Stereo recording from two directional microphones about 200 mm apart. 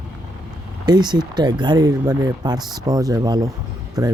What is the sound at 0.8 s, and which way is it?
Speech, 20° right (ahead or behind).